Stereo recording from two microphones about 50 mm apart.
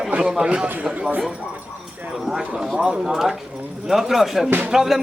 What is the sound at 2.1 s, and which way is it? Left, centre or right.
Speech, centre.